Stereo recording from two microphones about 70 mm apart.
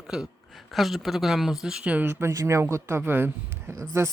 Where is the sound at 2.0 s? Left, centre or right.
Right.